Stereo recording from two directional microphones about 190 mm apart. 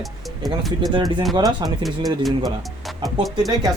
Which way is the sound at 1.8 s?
Centre (ahead or behind).